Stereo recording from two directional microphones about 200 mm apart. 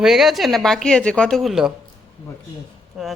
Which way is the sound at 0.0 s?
Centre (ahead or behind).